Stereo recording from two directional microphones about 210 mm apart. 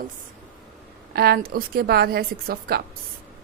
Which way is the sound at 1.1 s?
45° right (ahead or behind).